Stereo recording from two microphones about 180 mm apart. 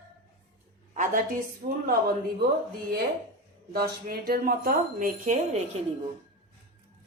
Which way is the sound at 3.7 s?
55° right (ahead or behind).